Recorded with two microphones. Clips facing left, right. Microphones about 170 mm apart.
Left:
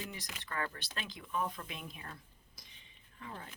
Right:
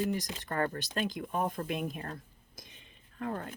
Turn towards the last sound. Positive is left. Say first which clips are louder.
# right 11 dB
turn(degrees=-60)  # may be behind; listen again after turning